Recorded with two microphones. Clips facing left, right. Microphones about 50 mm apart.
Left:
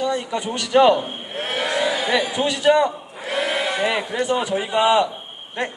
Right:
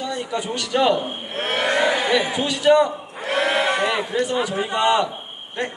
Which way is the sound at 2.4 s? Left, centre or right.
Left.